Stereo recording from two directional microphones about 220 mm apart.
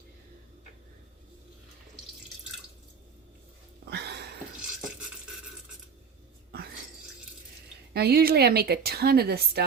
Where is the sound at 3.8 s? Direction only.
50° right (ahead or behind).